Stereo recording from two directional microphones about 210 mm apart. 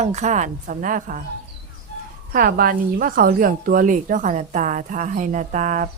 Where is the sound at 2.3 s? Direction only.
45° right (ahead or behind).